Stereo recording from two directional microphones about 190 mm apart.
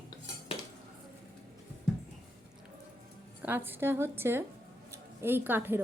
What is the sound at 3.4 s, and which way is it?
A woman's voice, 10° right (ahead or behind).